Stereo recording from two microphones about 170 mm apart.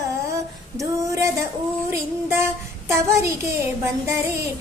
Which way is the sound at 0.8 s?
20° right (ahead or behind).